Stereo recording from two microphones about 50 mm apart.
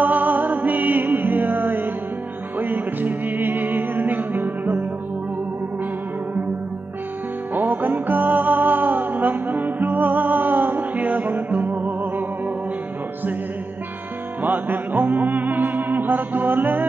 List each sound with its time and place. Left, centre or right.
0.0 s music: right
7.5 s music: right
14.4 s music: right